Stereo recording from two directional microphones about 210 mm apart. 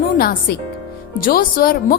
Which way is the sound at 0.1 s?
45° left (ahead or behind).